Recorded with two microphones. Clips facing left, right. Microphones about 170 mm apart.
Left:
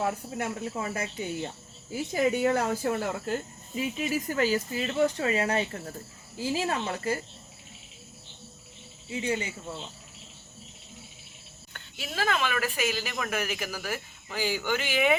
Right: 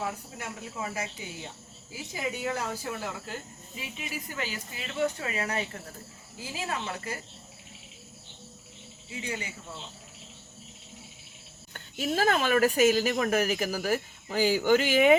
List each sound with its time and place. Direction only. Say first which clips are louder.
0.3 s speech: left 6 dB; 55° left (ahead or behind); by 7.2 s 30° left (ahead or behind)
9.0 s speech: left 6 dB; 25° left (ahead or behind)
11.7 s speech: right 9 dB; 40° right (ahead or behind)